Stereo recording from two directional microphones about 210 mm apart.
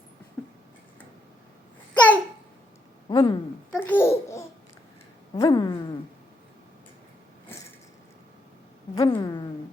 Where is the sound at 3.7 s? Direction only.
10° left (ahead or behind).